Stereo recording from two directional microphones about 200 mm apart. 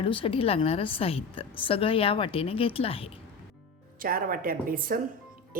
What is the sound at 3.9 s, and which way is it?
A woman's voice, 45° right (ahead or behind).